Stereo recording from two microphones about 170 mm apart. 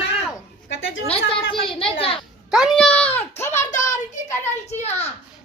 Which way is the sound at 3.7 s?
50° left (ahead or behind).